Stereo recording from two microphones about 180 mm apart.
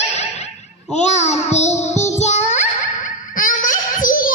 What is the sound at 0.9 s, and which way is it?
Child singing, 40° left (ahead or behind).